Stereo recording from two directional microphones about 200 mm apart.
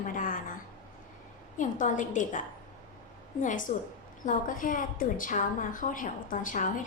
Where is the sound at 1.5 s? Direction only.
40° left (ahead or behind).